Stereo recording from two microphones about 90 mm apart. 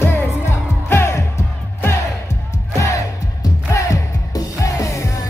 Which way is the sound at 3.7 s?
35° left (ahead or behind).